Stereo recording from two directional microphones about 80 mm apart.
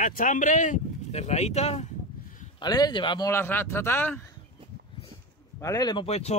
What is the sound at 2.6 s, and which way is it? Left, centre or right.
Speech, left.